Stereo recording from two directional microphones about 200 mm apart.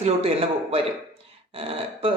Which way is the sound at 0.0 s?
30° right (ahead or behind).